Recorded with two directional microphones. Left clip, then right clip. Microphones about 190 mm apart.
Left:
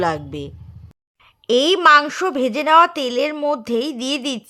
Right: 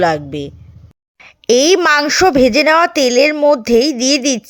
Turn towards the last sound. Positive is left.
turn(degrees=-20)  # may be behind; listen again after turning